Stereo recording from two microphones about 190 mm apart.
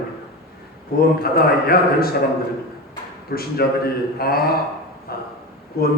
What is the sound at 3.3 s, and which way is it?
A man's voice, 55° left (ahead or behind).